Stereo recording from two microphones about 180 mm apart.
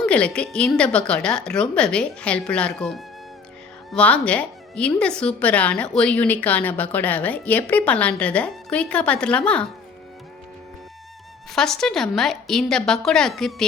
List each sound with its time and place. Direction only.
0.0 s a woman's voice: 5° left (ahead or behind)
11.5 s a woman's voice: centre (ahead or behind)